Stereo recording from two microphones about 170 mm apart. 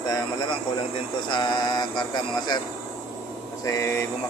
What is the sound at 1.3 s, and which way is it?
Speech, 25° left (ahead or behind).